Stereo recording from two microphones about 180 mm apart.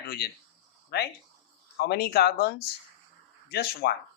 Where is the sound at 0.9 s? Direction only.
65° left (ahead or behind).